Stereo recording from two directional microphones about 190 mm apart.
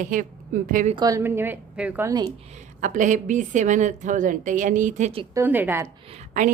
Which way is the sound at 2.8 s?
40° right (ahead or behind).